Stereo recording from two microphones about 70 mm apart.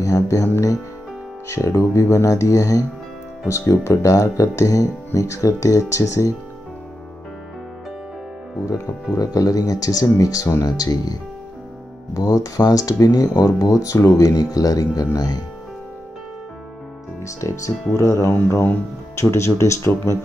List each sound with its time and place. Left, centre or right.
0.0 s speech: left
8.6 s speech: left
12.2 s speech: left
17.2 s speech: left
18.3 s speech: left